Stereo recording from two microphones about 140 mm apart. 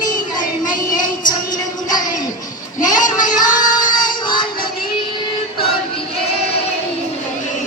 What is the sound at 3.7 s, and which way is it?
Music, 30° left (ahead or behind).